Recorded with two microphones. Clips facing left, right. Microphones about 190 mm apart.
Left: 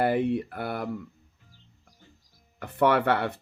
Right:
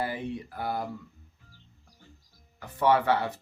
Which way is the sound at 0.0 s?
65° left (ahead or behind).